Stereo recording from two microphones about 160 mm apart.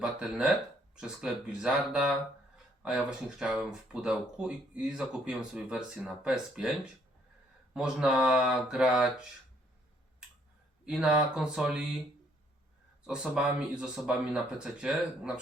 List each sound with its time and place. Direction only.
0.0 s speech: 5° right (ahead or behind)
10.8 s speech: 5° right (ahead or behind)
13.1 s speech: 5° right (ahead or behind)